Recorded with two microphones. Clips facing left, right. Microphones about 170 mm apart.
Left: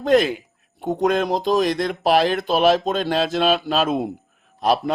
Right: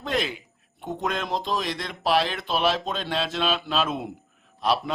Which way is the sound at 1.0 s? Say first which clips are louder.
Left 9 dB; 45° left (ahead or behind).